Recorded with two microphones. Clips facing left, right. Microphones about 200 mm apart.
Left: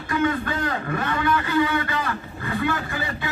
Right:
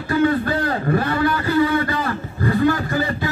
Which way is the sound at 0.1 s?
35° right (ahead or behind).